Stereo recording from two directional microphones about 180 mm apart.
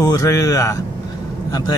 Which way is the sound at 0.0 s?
20° left (ahead or behind).